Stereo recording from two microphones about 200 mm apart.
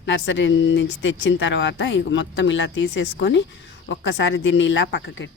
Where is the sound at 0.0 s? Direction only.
65° left (ahead or behind).